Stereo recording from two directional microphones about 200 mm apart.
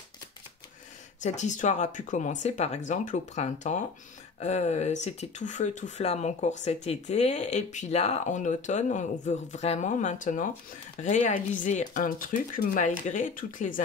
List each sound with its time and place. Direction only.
1.2 s speech: 35° left (ahead or behind)